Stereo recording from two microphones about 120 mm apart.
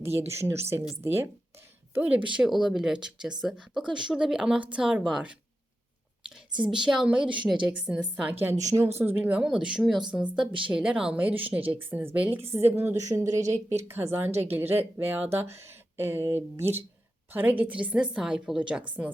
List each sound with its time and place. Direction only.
0.0 s a woman's voice: 20° right (ahead or behind)
8.5 s speech: 25° right (ahead or behind)
9.0 s speech: 15° right (ahead or behind)